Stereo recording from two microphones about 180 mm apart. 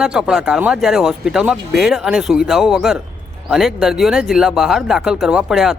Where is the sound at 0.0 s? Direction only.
5° right (ahead or behind).